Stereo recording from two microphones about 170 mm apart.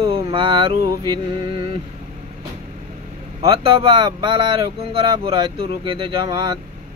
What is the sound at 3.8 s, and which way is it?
Speech, 25° right (ahead or behind).